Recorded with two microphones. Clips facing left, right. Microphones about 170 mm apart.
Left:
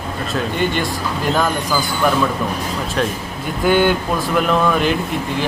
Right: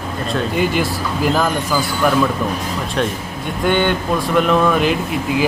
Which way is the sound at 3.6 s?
5° left (ahead or behind).